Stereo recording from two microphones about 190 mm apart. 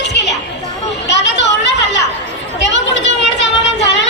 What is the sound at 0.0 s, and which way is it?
Chatter, 65° left (ahead or behind).